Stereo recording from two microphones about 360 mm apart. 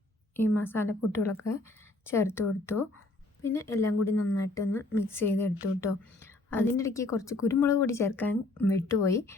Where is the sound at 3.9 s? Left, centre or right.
Left.